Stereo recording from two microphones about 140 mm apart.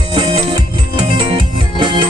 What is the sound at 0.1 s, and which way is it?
Music, 35° right (ahead or behind).